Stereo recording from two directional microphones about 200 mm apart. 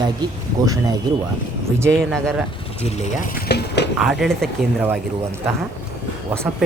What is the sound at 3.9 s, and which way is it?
Speech, centre (ahead or behind).